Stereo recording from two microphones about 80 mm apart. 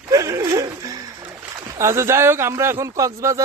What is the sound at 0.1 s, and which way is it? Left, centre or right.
Laughter, right.